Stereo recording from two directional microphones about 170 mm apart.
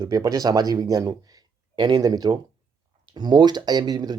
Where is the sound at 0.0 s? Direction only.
20° right (ahead or behind).